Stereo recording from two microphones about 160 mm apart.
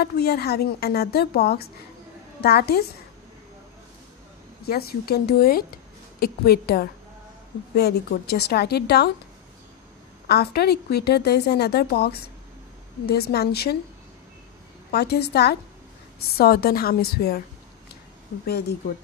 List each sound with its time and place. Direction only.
0.0 s a woman's voice: 80° left
4.6 s a woman's voice: 75° left (ahead or behind); by 9.1 s 90° left
10.2 s a woman's voice: 85° left
14.9 s a woman's voice: 85° left
16.3 s speech: 75° left (ahead or behind)
18.4 s a woman's voice: 85° left